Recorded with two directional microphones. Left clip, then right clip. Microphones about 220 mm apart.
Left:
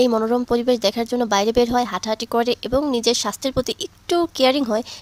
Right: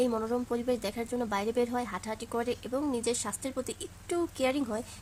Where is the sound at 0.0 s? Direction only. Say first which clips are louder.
Left 12 dB; 40° left (ahead or behind).